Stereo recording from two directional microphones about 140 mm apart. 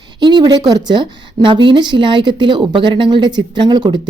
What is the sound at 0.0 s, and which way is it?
A woman's voice, 30° right (ahead or behind).